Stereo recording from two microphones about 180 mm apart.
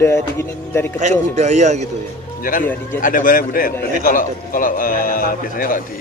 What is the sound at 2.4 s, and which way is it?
Speech, 50° left (ahead or behind).